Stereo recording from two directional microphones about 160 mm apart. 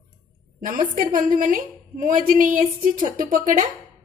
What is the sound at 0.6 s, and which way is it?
A woman's voice, 55° right (ahead or behind).